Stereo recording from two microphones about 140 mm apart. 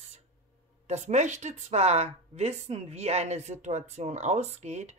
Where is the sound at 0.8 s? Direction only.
55° right (ahead or behind).